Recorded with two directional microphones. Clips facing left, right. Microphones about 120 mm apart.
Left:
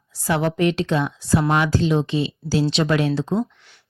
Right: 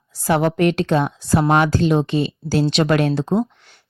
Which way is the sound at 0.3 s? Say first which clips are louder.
Right 3 dB; 55° right (ahead or behind).